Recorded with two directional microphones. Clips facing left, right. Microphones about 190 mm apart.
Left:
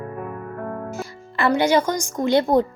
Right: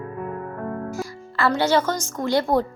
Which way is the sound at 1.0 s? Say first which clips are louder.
Left 1 dB; 20° left (ahead or behind).